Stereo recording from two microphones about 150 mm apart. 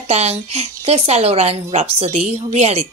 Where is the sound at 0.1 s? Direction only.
45° right (ahead or behind).